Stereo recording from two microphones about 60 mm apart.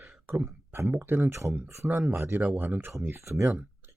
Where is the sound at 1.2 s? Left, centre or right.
Right.